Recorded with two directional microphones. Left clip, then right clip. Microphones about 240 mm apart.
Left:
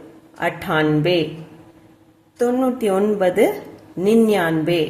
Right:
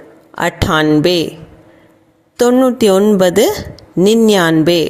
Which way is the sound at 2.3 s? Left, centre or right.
Right.